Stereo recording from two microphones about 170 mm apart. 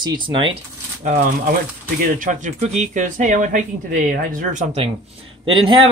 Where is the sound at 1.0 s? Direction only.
50° right (ahead or behind).